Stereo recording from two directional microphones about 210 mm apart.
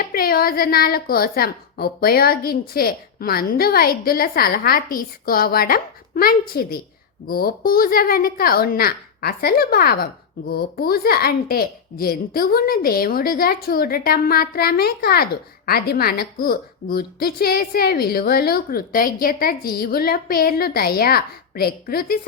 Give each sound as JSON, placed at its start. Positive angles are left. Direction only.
{"t": 0.0, "sound": "a child's voice", "side_deg": 45}